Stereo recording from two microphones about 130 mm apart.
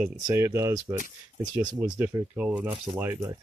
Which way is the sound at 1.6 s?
30° right (ahead or behind).